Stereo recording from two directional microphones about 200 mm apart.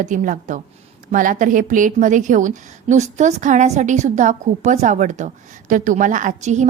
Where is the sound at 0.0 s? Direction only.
40° right (ahead or behind).